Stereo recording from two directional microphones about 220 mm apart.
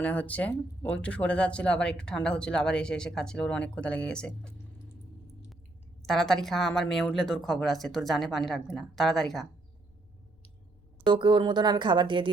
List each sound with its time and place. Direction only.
0.0 s speech: 10° left (ahead or behind)
6.1 s speech: centre (ahead or behind)
11.0 s speech: 20° right (ahead or behind)